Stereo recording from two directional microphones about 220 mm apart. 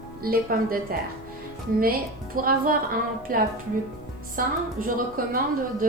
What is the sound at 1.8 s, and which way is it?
A woman's voice, 40° right (ahead or behind).